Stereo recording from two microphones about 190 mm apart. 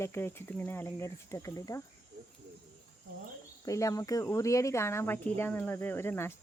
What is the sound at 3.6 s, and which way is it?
A woman's voice, 15° left (ahead or behind).